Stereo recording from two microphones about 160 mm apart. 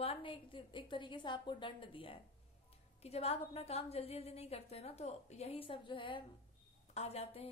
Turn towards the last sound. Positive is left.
turn(degrees=40)  # may be behind; listen again after turning